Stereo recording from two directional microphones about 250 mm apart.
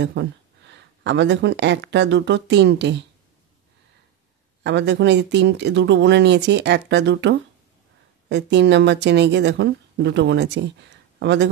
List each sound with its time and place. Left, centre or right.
0.0 s speech: right
4.6 s a woman's voice: right